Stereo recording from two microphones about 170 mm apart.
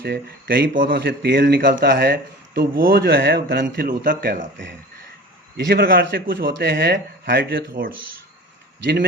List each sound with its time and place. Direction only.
0.0 s a man's voice: 70° right (ahead or behind)
1.0 s a man's voice: 80° right
8.8 s a man's voice: 75° right (ahead or behind)